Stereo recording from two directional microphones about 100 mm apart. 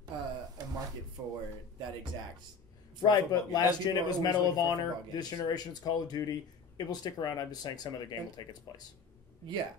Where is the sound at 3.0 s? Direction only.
40° left (ahead or behind).